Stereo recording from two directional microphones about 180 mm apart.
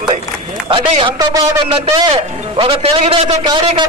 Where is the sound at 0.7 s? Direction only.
30° right (ahead or behind).